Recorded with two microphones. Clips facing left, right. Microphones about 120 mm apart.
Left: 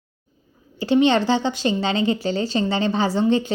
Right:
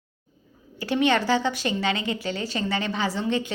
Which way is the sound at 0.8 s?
25° left (ahead or behind).